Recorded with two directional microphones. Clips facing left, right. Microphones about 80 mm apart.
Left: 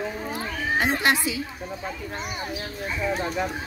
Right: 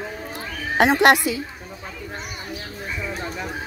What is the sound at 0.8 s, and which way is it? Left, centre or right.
Speech, right.